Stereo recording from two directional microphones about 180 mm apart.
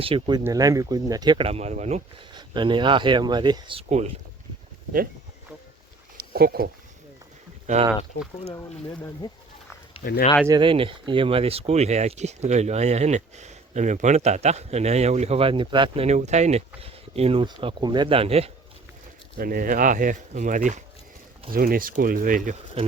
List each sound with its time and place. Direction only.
0.0 s speech: 25° right (ahead or behind)
2.3 s speech: 25° right (ahead or behind)
3.8 s speech: 40° right (ahead or behind)
6.1 s a sound: 60° right (ahead or behind)
9.0 s speech: 25° left (ahead or behind)
10.0 s speech: 55° left (ahead or behind)
10.4 s speech: 25° right (ahead or behind)
19.4 s speech: 55° right (ahead or behind)